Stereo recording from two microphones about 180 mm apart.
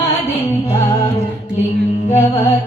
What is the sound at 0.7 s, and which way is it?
Music, 15° left (ahead or behind).